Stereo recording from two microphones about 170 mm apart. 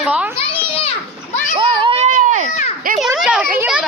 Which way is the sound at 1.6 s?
30° right (ahead or behind).